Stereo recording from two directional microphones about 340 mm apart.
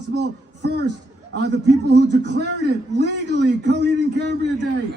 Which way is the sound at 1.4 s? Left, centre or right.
Right.